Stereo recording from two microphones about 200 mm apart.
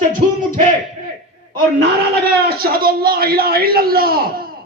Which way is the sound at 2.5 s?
50° right (ahead or behind).